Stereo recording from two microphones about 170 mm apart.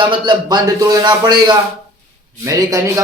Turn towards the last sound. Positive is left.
turn(degrees=-20)  # may be behind; listen again after turning